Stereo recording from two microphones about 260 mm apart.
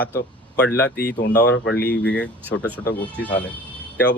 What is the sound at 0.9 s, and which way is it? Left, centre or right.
A man's voice, left.